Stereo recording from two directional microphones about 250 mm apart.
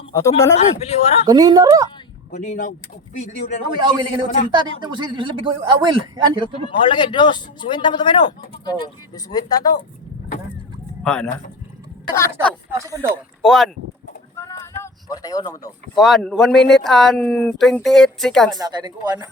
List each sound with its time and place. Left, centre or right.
0.1 s speech: centre
0.8 s speech: left
1.2 s speech: centre
2.3 s speech: left
3.8 s a man's voice: centre
6.7 s speech: centre
11.0 s speech: centre
12.7 s speech: centre
13.4 s speech: centre
14.3 s a sound: centre
16.0 s speech: centre
18.6 s speech: centre